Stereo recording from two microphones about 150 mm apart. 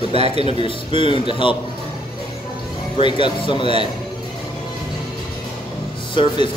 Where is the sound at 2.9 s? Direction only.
35° left (ahead or behind).